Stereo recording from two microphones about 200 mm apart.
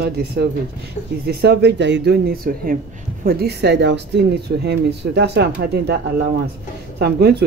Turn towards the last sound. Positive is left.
turn(degrees=-55)  # may be behind; listen again after turning